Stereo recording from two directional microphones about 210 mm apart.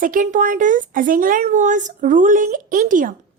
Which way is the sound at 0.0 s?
40° right (ahead or behind).